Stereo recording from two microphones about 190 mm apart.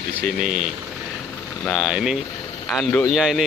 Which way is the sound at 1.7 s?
Centre (ahead or behind).